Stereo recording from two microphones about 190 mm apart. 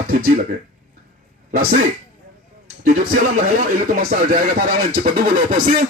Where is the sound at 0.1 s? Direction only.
50° right (ahead or behind).